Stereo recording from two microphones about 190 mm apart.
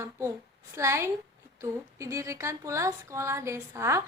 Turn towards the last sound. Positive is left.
turn(degrees=-15)  # may be behind; listen again after turning